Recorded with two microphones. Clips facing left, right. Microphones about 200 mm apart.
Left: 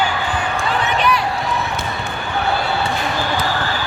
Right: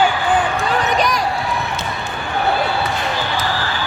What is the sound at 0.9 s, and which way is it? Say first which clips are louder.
Run: even; 40° right (ahead or behind).